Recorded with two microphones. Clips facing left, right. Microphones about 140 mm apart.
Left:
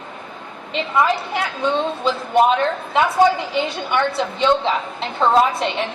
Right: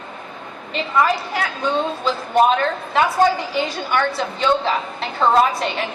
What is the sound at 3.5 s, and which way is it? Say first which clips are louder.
A woman's voice: even; 20° left (ahead or behind).